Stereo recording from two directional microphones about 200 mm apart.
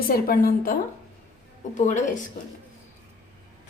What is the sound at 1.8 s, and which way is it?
Speech, 40° left (ahead or behind).